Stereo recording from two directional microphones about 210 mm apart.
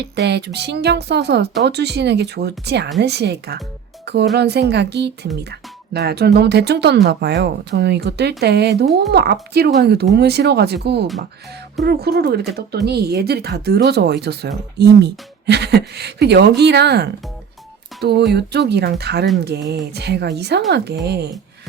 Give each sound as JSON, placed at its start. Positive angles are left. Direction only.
{"t": 0.0, "sound": "speech", "side_deg": -55}